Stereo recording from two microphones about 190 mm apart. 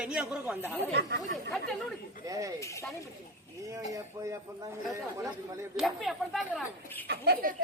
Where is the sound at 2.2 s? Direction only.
15° right (ahead or behind).